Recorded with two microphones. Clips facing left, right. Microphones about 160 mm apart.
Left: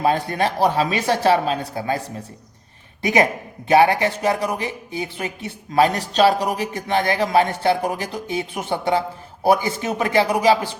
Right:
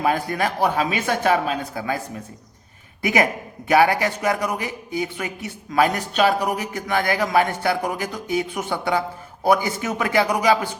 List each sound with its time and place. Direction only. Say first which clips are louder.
0.0 s speech: left 2 dB; 30° left (ahead or behind)
3.0 s speech: left 2 dB; 30° left (ahead or behind)